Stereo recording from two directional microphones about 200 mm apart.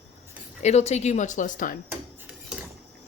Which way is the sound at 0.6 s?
35° left (ahead or behind).